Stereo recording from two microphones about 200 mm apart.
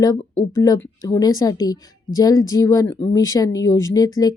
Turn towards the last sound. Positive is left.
turn(degrees=15)  # may be behind; listen again after turning